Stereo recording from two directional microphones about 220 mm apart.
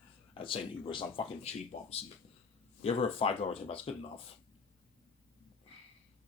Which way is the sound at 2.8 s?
25° left (ahead or behind).